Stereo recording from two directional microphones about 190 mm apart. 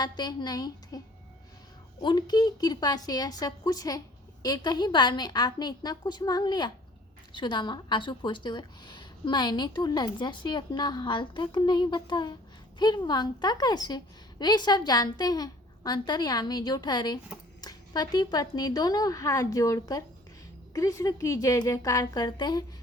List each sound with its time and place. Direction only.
0.0 s a woman's voice: 20° left (ahead or behind)